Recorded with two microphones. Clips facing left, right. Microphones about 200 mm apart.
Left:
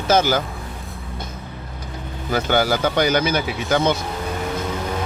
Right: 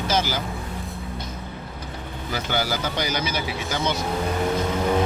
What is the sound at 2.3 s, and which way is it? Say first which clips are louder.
Speech: left 7 dB; 55° left (ahead or behind).